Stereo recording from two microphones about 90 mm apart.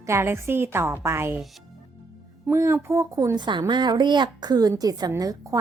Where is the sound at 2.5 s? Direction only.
30° right (ahead or behind).